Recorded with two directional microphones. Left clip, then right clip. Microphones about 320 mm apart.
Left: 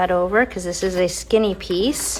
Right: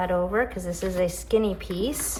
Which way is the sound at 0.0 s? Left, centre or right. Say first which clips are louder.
Left 7 dB; left.